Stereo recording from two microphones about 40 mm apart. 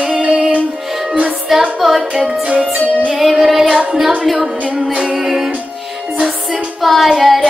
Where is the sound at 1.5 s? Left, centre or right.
Centre.